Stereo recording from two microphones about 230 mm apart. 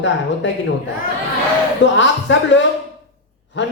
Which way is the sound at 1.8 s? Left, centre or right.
Left.